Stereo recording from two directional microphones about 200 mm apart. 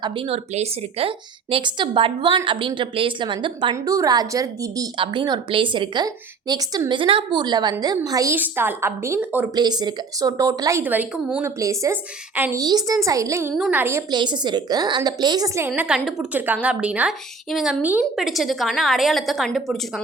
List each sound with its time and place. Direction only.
0.0 s a woman's voice: 25° right (ahead or behind)
13.5 s a woman's voice: 5° right (ahead or behind)